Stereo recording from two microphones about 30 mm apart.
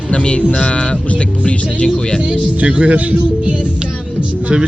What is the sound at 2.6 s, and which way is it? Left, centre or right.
Speech, right.